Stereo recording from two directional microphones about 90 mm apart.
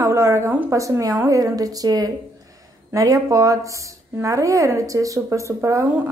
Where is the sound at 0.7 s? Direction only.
35° right (ahead or behind).